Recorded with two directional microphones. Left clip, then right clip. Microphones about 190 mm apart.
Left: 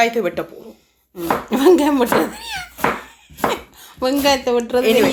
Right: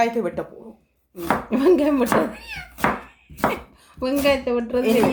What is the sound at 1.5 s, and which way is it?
Speech, 25° left (ahead or behind).